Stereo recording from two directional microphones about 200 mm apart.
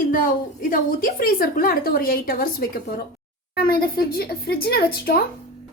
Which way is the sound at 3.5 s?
50° left (ahead or behind).